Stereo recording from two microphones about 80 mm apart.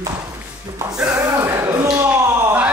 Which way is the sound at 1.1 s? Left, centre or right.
Right.